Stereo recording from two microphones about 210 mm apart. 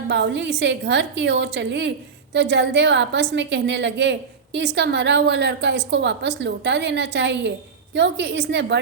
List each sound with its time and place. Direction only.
0.1 s a woman's voice: 55° right (ahead or behind)